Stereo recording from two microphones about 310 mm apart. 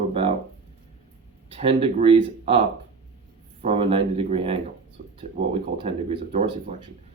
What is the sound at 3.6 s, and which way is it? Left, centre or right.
Speech, centre.